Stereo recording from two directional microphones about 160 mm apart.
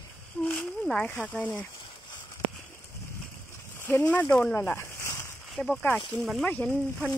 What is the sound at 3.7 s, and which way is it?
Speech, 15° left (ahead or behind).